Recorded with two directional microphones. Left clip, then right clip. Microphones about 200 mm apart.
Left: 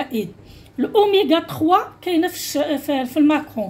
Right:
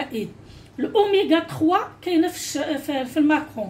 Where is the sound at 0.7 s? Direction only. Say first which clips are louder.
Left 3 dB; 30° left (ahead or behind).